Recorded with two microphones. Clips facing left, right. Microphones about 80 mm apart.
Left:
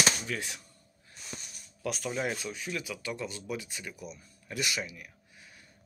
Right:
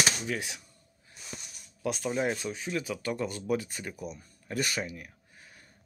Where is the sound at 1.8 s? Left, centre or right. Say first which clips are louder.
Right 3 dB; right.